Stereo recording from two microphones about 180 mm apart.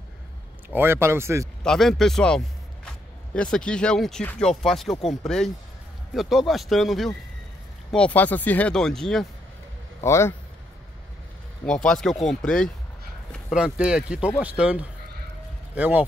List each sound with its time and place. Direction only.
0.7 s speech: 15° right (ahead or behind)
1.6 s a man's voice: centre (ahead or behind)
10.0 s a man's voice: 15° left (ahead or behind)
11.6 s speech: 5° left (ahead or behind)